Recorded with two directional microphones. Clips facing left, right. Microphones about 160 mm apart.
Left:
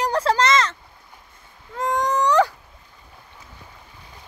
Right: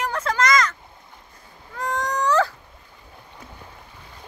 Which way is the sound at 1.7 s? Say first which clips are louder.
Left 4 dB; 20° left (ahead or behind).